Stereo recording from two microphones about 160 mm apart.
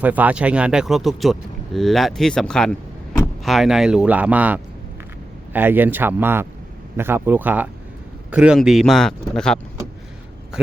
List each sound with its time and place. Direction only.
0.0 s speech: 10° right (ahead or behind)